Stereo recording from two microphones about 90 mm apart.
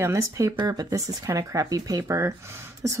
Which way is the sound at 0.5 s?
45° right (ahead or behind).